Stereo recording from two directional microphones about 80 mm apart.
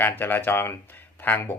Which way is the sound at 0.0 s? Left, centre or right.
Left.